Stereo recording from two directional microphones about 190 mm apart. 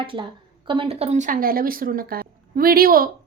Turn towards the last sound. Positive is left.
turn(degrees=-50)  # may be behind; listen again after turning